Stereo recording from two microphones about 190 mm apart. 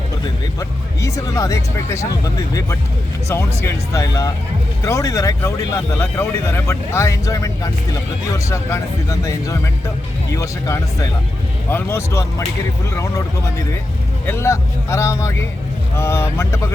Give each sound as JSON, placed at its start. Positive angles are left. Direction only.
{"t": 0.6, "sound": "speech", "side_deg": 20}
{"t": 14.3, "sound": "speech", "side_deg": 15}